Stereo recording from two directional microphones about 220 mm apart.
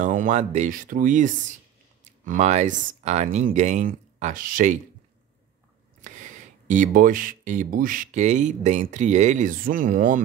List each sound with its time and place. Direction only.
0.0 s speech: 35° right (ahead or behind)
6.0 s speech: 35° right (ahead or behind)